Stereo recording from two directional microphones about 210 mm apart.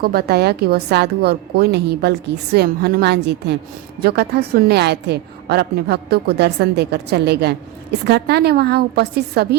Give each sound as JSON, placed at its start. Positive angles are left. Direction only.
{"t": 0.0, "sound": "a woman's voice", "side_deg": -45}